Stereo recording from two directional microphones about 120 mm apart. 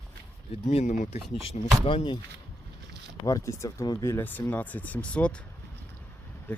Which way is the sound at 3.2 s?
25° left (ahead or behind).